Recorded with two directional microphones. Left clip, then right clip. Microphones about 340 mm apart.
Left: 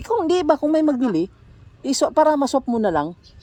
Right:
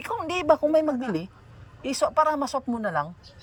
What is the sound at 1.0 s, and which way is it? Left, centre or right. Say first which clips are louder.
Speech: left 9 dB; left.